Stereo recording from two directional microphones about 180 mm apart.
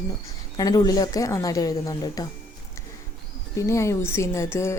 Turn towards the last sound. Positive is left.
turn(degrees=15)  # may be behind; listen again after turning